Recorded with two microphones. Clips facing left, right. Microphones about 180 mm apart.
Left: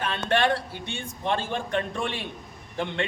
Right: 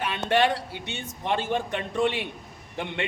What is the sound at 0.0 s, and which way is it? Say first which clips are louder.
A man's voice: right 1 dB; 15° right (ahead or behind).